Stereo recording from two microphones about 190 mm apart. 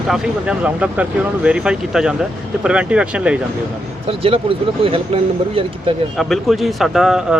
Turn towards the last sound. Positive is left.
turn(degrees=-5)  # may be behind; listen again after turning